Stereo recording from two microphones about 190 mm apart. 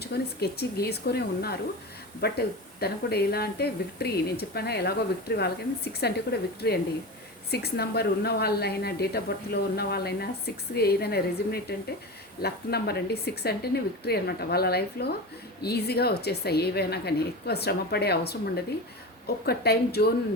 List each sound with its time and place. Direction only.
0.0 s a woman's voice: 55° left (ahead or behind)